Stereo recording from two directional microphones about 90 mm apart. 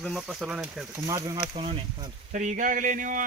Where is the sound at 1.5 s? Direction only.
90° right.